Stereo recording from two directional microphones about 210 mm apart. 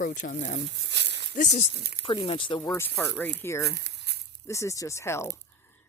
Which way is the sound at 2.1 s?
25° left (ahead or behind).